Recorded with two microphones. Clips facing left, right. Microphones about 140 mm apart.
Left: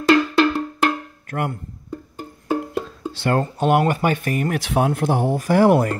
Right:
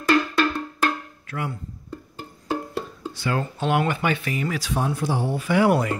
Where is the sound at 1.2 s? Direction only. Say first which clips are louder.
Left 6 dB; 55° left (ahead or behind).